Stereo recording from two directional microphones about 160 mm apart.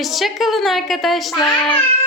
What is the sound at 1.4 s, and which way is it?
Speech, 25° left (ahead or behind).